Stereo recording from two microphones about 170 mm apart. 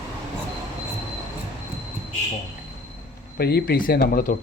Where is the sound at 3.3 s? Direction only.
70° left (ahead or behind).